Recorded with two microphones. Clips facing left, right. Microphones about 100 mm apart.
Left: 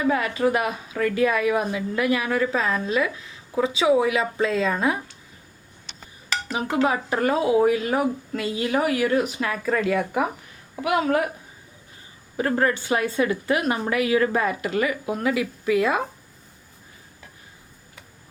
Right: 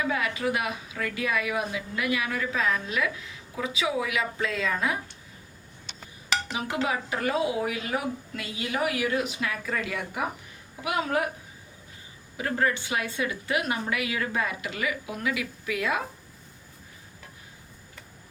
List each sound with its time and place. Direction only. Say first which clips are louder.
0.1 s a woman's voice: left 6 dB; 40° left (ahead or behind)
6.5 s speech: left 9 dB; 40° left (ahead or behind)
12.4 s a woman's voice: left 5 dB; 45° left (ahead or behind)